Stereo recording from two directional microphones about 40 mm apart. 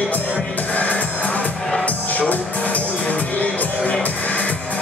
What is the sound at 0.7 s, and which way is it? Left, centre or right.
Music, left.